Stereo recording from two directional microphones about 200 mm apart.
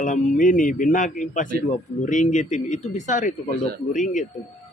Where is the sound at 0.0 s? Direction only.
40° left (ahead or behind).